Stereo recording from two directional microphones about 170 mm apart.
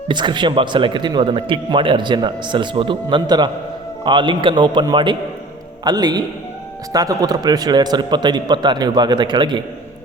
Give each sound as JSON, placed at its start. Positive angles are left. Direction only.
{"t": 0.1, "sound": "speech", "side_deg": -25}